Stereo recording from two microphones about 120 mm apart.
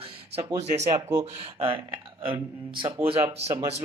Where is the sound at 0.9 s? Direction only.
25° right (ahead or behind).